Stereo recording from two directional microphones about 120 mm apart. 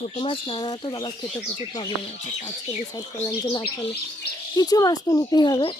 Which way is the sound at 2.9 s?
30° left (ahead or behind).